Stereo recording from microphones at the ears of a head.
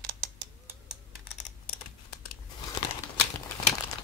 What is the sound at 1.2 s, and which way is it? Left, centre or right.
Crumpling, left.